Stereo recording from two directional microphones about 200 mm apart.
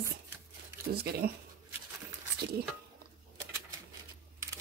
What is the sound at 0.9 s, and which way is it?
Speech, 50° right (ahead or behind).